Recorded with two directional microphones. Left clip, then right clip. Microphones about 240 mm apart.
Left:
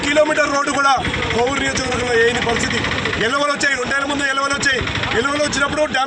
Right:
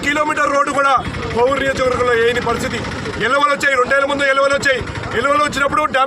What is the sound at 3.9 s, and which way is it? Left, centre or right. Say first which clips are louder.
Speech: right 4 dB; centre.